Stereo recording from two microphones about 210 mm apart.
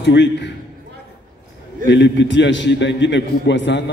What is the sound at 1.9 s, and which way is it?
A man's voice, 55° left (ahead or behind).